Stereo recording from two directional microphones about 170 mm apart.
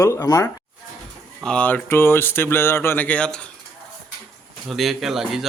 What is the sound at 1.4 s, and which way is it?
Speech, 5° left (ahead or behind).